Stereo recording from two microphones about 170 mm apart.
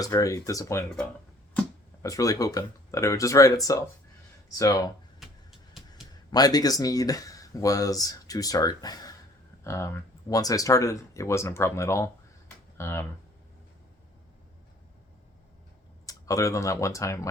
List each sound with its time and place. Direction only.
0.0 s speech: 20° left (ahead or behind)
1.6 s a sound: 5° left (ahead or behind)
2.0 s speech: 20° left (ahead or behind)
5.2 s a sound: centre (ahead or behind)
6.3 s speech: 20° left (ahead or behind)
16.0 s speech: 20° left (ahead or behind)